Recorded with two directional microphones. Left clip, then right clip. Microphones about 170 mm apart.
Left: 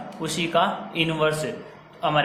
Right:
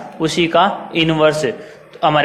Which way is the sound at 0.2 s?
30° right (ahead or behind).